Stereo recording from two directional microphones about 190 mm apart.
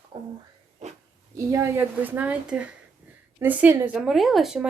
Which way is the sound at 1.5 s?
15° right (ahead or behind).